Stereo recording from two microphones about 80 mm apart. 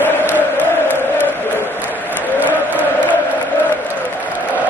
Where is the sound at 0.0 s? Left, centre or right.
Left.